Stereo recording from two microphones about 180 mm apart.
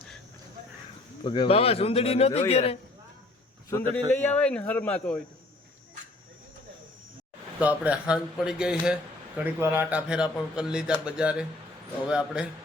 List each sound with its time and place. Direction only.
1.2 s speech: 30° left (ahead or behind)
4.1 s a man's voice: 10° left (ahead or behind)
7.6 s a man's voice: 5° right (ahead or behind)